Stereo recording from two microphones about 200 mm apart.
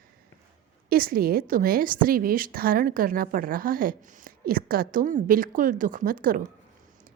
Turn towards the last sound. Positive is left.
turn(degrees=-45)  # may be behind; listen again after turning